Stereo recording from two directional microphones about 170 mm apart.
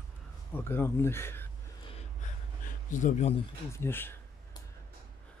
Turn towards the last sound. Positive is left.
turn(degrees=15)  # may be behind; listen again after turning